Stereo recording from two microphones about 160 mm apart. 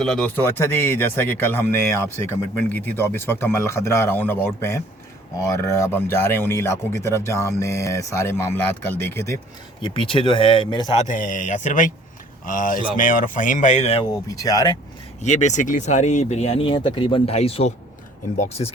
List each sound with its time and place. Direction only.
0.0 s speech: centre (ahead or behind)
0.3 s speech: 15° left (ahead or behind)
9.8 s speech: 30° left (ahead or behind)
10.9 s speech: 50° left (ahead or behind)
14.3 s speech: 20° left (ahead or behind)
15.2 s speech: 45° left (ahead or behind)